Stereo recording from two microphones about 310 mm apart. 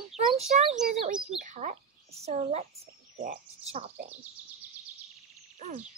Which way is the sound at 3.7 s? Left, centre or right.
Right.